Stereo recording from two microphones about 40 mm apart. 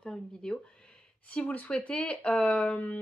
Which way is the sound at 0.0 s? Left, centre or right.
Centre.